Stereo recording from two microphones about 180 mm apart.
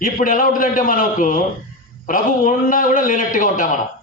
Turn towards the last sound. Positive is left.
turn(degrees=45)  # may be behind; listen again after turning